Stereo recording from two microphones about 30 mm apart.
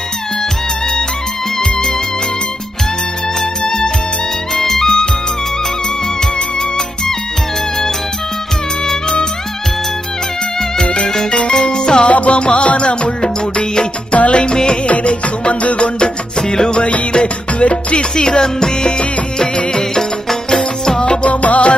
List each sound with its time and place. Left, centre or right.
1.6 s music: left
3.6 s music: left
4.6 s music: centre
11.5 s music: left
12.1 s music: left
14.1 s music: left
14.4 s music: left
17.1 s music: left
18.1 s music: left
21.0 s music: left
21.3 s music: left